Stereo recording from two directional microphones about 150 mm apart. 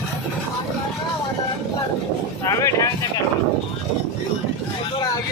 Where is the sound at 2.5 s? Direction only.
20° left (ahead or behind).